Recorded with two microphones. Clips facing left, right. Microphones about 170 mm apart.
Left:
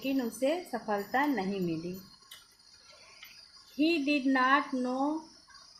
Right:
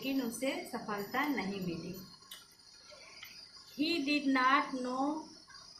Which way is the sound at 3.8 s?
60° left (ahead or behind).